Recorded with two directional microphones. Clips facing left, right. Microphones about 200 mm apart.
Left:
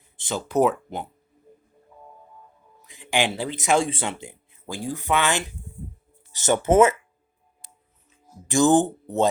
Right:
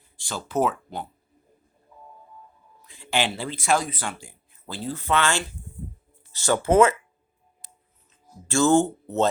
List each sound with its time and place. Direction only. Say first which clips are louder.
0.2 s speech: left 4 dB; 20° left (ahead or behind)
2.8 s speech: left 2 dB; 15° left (ahead or behind)
8.4 s speech: left 1 dB; 15° left (ahead or behind)